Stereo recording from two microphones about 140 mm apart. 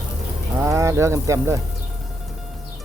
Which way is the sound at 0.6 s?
20° right (ahead or behind).